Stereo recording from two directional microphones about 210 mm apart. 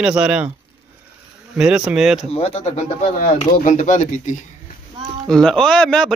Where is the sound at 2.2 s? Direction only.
30° left (ahead or behind).